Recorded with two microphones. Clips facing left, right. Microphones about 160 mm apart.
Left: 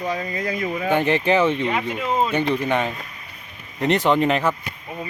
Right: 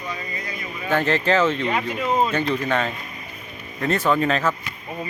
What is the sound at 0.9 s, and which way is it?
Speech, 15° left (ahead or behind).